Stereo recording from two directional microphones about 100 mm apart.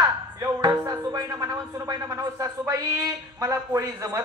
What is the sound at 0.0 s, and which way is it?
Speech, 35° right (ahead or behind).